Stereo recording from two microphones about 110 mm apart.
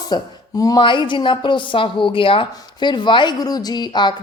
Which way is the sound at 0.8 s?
45° left (ahead or behind).